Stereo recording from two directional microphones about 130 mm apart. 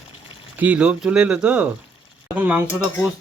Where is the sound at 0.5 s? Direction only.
10° right (ahead or behind).